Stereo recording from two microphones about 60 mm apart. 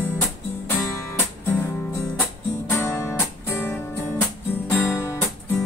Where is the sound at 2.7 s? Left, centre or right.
Left.